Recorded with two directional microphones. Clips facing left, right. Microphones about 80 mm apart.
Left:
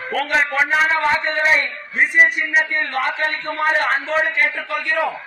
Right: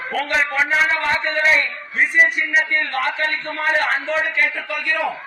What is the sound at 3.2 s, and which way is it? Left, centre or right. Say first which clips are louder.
Speech: left 1 dB; left.